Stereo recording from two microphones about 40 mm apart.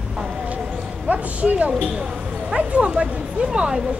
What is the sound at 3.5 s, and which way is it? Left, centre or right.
Speech, right.